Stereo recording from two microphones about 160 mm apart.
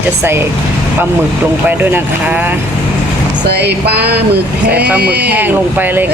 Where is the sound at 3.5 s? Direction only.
90° right.